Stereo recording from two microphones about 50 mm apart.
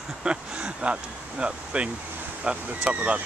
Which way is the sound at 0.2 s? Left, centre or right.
Centre.